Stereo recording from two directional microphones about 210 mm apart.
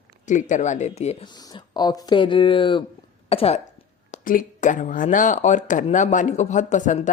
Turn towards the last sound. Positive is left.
turn(degrees=35)  # may be behind; listen again after turning